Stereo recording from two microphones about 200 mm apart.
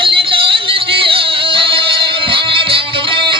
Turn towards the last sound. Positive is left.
turn(degrees=-25)  # may be behind; listen again after turning